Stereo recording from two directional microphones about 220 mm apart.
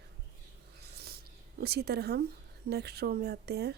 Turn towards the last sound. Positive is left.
turn(degrees=-45)  # may be behind; listen again after turning